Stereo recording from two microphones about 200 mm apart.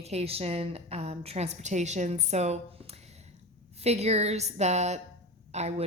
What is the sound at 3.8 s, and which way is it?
Speech, 30° right (ahead or behind).